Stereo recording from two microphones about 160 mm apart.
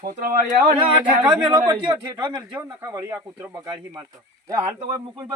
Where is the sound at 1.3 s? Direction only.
25° right (ahead or behind); by 3.5 s 10° right (ahead or behind).